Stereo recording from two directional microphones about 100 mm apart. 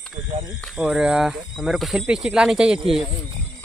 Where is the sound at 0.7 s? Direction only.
5° right (ahead or behind).